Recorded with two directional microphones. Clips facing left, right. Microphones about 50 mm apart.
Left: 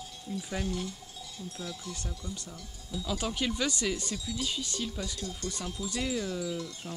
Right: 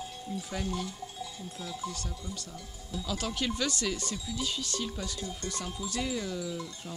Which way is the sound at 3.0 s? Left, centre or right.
Centre.